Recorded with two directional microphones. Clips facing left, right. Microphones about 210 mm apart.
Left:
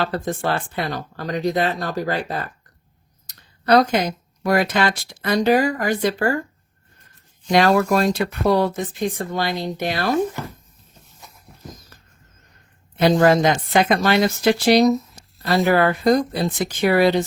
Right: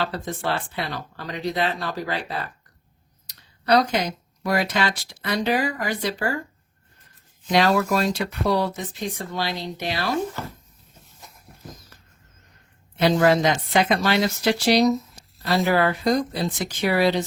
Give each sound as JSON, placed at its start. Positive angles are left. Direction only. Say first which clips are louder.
{"t": 0.0, "sound": "speech", "louder": "left 4 dB", "side_deg": 50}
{"t": 7.4, "sound": "speech", "louder": "left 4 dB", "side_deg": 45}
{"t": 13.0, "sound": "speech", "louder": "left 3 dB", "side_deg": 45}